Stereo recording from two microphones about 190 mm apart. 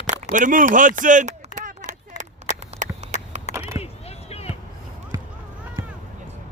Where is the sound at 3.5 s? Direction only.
40° left (ahead or behind).